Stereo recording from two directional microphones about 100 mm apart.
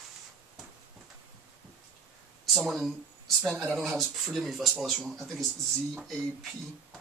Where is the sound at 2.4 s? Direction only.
Centre (ahead or behind).